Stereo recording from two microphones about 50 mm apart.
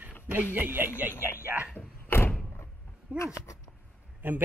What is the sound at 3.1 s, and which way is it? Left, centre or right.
A man's voice, right.